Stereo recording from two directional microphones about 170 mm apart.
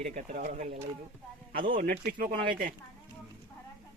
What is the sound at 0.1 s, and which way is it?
Speech, 50° right (ahead or behind).